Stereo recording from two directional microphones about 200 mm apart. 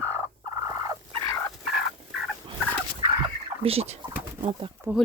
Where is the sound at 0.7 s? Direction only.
20° right (ahead or behind).